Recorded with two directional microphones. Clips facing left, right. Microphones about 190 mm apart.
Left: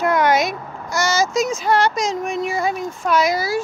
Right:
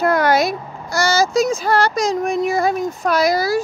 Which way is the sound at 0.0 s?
35° right (ahead or behind).